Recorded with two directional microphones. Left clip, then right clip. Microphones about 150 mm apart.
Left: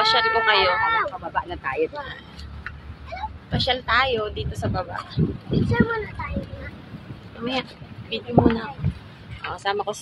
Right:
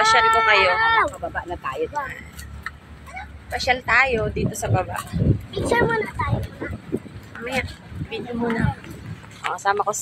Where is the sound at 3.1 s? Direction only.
10° right (ahead or behind).